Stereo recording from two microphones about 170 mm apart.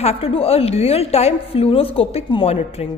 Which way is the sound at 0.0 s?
35° left (ahead or behind).